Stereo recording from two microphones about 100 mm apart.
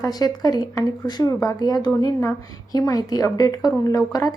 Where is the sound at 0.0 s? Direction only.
40° left (ahead or behind).